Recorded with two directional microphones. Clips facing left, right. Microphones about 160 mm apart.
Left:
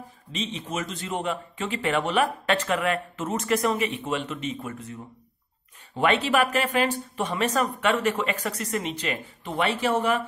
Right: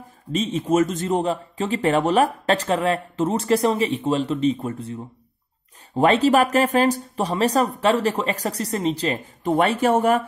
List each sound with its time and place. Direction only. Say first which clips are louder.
0.3 s speech: right 11 dB; 45° right (ahead or behind)